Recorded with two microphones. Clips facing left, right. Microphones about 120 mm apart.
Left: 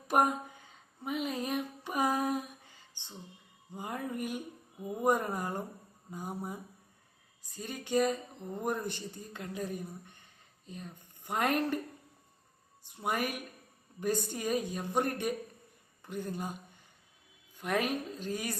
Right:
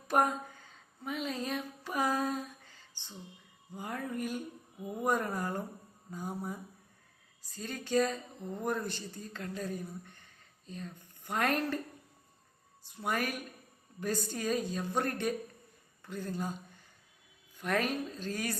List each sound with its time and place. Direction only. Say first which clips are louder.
0.1 s a sound: left 1 dB; 15° left (ahead or behind)
3.8 s speech: even; 15° left (ahead or behind)
12.8 s speech: left 1 dB; 15° left (ahead or behind)